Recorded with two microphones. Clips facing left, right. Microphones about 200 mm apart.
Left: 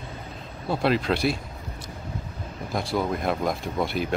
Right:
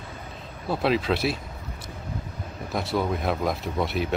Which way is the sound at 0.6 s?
Centre (ahead or behind).